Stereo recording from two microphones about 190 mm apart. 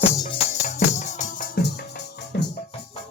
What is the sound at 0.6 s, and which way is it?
Music, 35° left (ahead or behind).